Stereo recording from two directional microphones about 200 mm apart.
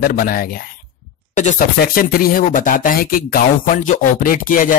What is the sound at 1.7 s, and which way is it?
Speech, 45° left (ahead or behind).